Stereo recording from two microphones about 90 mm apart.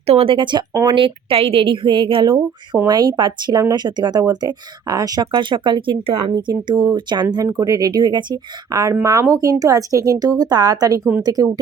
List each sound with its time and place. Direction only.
0.2 s speech: 70° right (ahead or behind)
0.9 s a woman's voice: 80° right
2.8 s speech: 50° right (ahead or behind)
5.3 s speech: 65° right (ahead or behind)
6.5 s speech: 50° right (ahead or behind)
7.6 s speech: 40° right (ahead or behind)
8.7 s speech: 35° right (ahead or behind)